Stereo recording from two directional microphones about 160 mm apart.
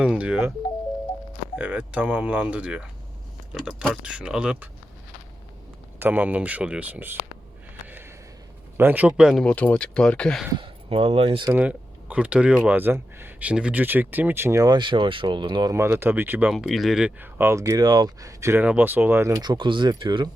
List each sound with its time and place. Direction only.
0.0 s speech: 5° right (ahead or behind)
1.5 s speech: 10° right (ahead or behind)
6.0 s speech: 10° right (ahead or behind)
8.8 s speech: 10° right (ahead or behind)
9.4 s speech: 10° left (ahead or behind)
10.5 s speech: 35° right (ahead or behind)
11.5 s speech: 10° right (ahead or behind)
16.5 s speech: centre (ahead or behind); by 20.3 s 30° right (ahead or behind)